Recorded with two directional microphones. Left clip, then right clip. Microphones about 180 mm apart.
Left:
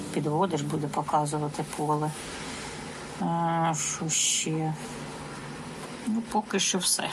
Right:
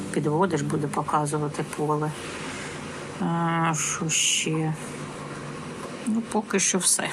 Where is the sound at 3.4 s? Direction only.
15° left (ahead or behind).